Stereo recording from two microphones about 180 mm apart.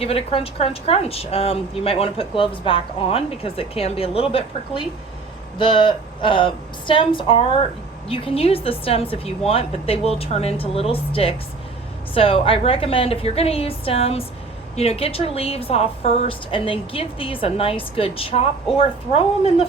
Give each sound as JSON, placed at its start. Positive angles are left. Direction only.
{"t": 0.0, "sound": "a woman's voice", "side_deg": 35}